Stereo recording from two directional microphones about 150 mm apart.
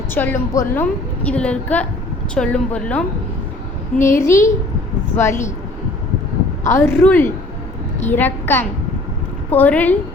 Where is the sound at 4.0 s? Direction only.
20° left (ahead or behind).